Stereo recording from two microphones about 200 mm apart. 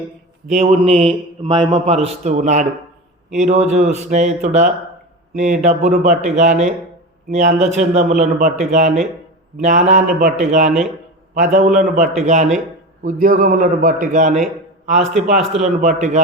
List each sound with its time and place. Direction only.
0.5 s a man's voice: 30° right (ahead or behind)